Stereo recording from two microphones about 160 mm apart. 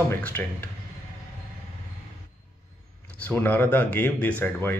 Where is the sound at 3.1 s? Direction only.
10° left (ahead or behind).